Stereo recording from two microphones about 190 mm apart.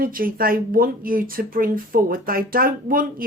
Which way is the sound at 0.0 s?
50° right (ahead or behind).